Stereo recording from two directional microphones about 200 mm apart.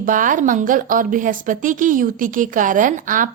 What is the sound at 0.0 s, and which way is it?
Speech, 40° right (ahead or behind).